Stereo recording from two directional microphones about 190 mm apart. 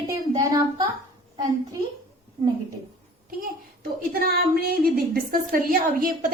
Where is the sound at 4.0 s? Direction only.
50° right (ahead or behind).